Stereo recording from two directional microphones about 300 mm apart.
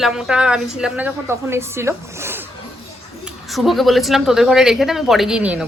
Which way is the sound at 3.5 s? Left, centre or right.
Centre.